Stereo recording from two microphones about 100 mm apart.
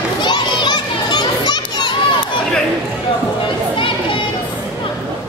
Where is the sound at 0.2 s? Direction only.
50° left (ahead or behind).